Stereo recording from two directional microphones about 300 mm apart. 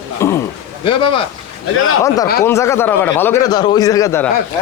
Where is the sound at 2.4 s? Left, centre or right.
Centre.